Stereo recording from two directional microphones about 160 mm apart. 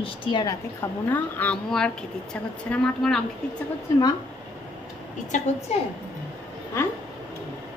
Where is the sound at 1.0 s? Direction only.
10° left (ahead or behind).